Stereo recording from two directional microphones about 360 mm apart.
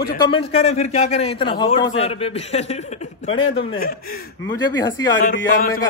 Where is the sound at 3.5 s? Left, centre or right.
Left.